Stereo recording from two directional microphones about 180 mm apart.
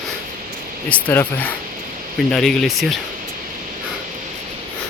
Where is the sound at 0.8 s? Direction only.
10° left (ahead or behind).